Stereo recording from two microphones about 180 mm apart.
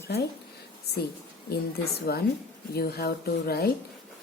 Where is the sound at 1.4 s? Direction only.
60° left (ahead or behind).